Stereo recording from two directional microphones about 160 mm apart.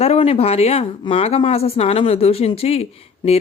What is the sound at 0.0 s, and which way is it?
Speech, 40° left (ahead or behind).